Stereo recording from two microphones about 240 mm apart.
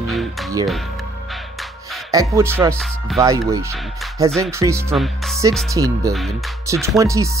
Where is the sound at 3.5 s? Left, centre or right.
Centre.